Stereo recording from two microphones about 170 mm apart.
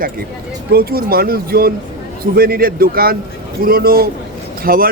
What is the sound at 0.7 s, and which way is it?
Speech, 65° right (ahead or behind).